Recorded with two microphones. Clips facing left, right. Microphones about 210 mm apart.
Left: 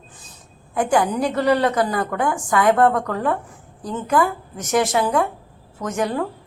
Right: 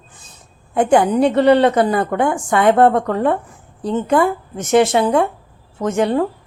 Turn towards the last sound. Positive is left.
turn(degrees=-25)  # may be behind; listen again after turning